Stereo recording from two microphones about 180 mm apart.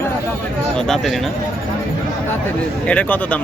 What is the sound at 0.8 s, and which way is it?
Speech, centre (ahead or behind).